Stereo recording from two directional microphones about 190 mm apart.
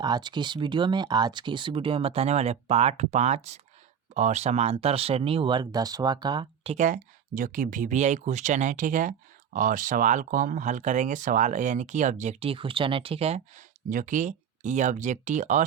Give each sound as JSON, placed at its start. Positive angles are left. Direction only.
{"t": 0.0, "sound": "speech", "side_deg": -20}
{"t": 6.7, "sound": "speech", "side_deg": -45}